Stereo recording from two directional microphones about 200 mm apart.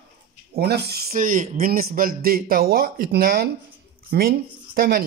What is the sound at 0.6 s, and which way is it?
A man's voice, 55° right (ahead or behind).